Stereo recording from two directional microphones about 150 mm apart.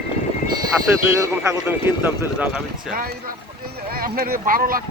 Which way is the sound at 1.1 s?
20° right (ahead or behind).